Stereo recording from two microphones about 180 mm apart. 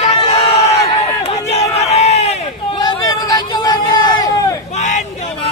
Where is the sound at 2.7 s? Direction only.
20° left (ahead or behind).